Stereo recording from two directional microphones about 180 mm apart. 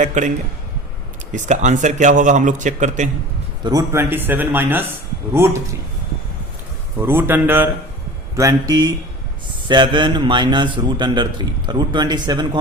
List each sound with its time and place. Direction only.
0.0 s speech: 45° right (ahead or behind)
3.6 s speech: 20° right (ahead or behind)
7.0 s a man's voice: 10° right (ahead or behind)